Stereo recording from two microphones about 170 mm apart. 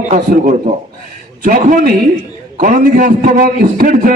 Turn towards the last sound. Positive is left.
turn(degrees=-55)  # may be behind; listen again after turning